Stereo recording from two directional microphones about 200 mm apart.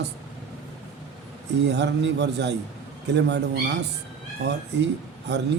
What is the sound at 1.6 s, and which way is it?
Speech, 60° right (ahead or behind).